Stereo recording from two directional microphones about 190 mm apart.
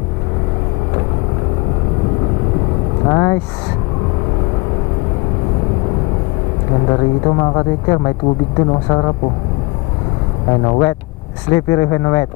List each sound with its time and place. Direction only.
3.1 s vehicle: 20° left (ahead or behind)
6.9 s speech: 25° left (ahead or behind)
10.5 s speech: 25° left (ahead or behind)